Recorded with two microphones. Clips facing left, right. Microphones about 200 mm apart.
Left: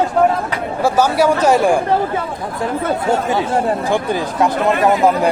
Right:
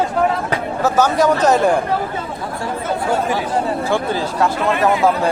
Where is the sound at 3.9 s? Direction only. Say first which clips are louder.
Left 1 dB; 15° left (ahead or behind).